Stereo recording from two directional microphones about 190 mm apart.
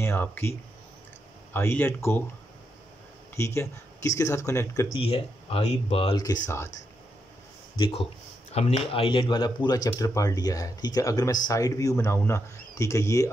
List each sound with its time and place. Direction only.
0.0 s speech: 10° left (ahead or behind)
3.3 s speech: 15° left (ahead or behind)
4.9 s speech: 30° left (ahead or behind)
7.7 s speech: 30° left (ahead or behind)